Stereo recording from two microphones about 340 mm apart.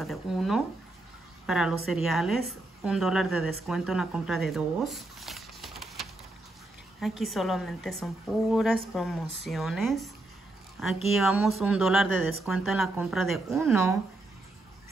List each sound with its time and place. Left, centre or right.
0.0 s a woman's voice: centre
12.1 s speech: left
12.4 s a woman's voice: centre